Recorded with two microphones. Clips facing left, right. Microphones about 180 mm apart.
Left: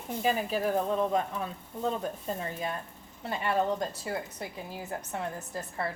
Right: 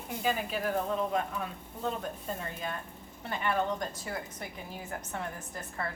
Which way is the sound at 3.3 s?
30° left (ahead or behind).